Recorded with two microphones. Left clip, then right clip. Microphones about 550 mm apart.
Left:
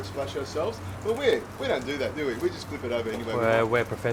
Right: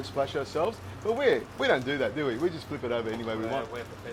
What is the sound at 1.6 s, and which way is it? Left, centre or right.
Speech, right.